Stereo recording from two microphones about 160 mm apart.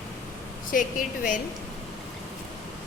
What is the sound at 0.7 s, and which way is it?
Speech, 55° left (ahead or behind).